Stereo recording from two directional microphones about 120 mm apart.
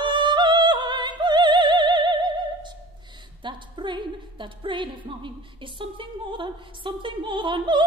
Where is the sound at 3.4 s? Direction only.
40° right (ahead or behind).